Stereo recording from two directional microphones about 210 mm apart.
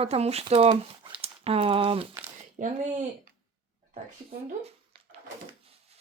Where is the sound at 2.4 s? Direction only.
35° right (ahead or behind).